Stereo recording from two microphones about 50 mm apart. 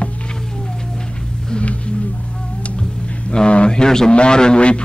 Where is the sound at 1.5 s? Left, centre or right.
Left.